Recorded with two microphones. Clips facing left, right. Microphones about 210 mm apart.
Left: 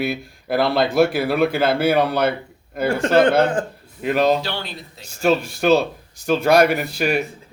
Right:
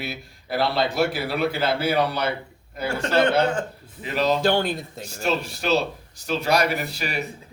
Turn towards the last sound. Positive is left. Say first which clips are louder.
# left 8 dB
turn(degrees=50)  # may be behind; listen again after turning